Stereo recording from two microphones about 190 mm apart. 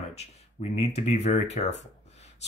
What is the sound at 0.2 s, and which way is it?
Speech, 35° left (ahead or behind).